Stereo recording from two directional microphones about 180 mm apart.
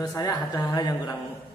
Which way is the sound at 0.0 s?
20° left (ahead or behind).